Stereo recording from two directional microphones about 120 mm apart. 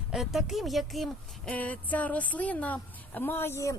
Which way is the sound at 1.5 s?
15° left (ahead or behind).